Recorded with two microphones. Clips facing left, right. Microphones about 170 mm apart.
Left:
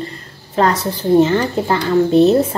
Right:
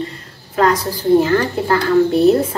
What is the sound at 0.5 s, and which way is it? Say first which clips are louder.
A woman's voice: even; 25° left (ahead or behind).